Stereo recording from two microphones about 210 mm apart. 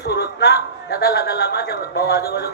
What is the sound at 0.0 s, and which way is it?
A man's voice, 50° left (ahead or behind).